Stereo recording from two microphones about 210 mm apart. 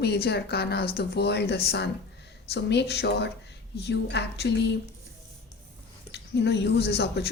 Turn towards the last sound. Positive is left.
turn(degrees=50)  # may be behind; listen again after turning